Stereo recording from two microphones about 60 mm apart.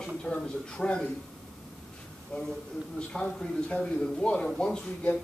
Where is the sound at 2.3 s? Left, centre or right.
Centre.